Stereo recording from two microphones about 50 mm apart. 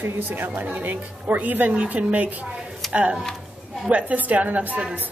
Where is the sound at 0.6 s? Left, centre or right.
Right.